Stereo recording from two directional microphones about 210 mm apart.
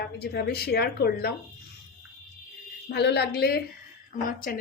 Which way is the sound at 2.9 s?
50° left (ahead or behind).